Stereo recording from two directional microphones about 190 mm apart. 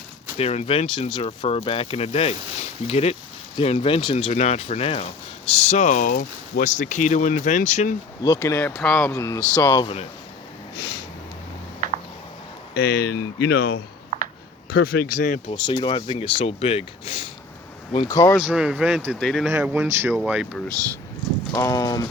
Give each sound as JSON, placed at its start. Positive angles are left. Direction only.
{"t": 0.3, "sound": "speech", "side_deg": 30}
{"t": 8.2, "sound": "speech", "side_deg": 15}
{"t": 8.7, "sound": "speech", "side_deg": 0}
{"t": 9.1, "sound": "speech", "side_deg": 15}
{"t": 9.8, "sound": "speech", "side_deg": 30}
{"t": 12.7, "sound": "speech", "side_deg": 55}
{"t": 14.1, "sound": "a sound", "side_deg": -40}
{"t": 14.7, "sound": "a man's voice", "side_deg": 55}
{"t": 15.4, "sound": "speech", "side_deg": 25}
{"t": 18.1, "sound": "speech", "side_deg": 15}
{"t": 18.4, "sound": "speech", "side_deg": -5}
{"t": 19.5, "sound": "speech", "side_deg": -10}
{"t": 21.5, "sound": "speech", "side_deg": 20}